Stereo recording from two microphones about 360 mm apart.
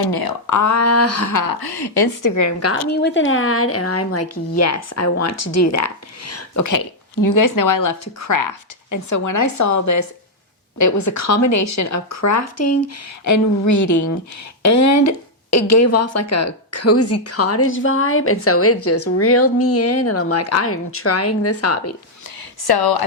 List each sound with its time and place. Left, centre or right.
0.1 s speech: left
1.6 s a woman's voice: left
2.3 s speech: left
2.9 s speech: left
22.6 s speech: left